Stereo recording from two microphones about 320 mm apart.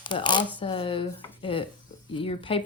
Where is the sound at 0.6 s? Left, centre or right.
Centre.